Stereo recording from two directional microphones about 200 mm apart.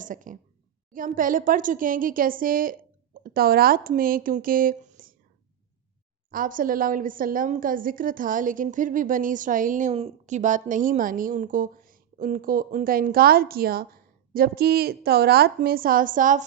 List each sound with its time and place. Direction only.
0.0 s a woman's voice: 40° right (ahead or behind)
6.3 s a woman's voice: 45° right (ahead or behind)